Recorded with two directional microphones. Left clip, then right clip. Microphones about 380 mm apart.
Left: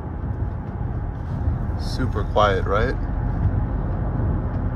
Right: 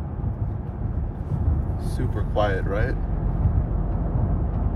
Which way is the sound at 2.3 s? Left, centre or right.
Left.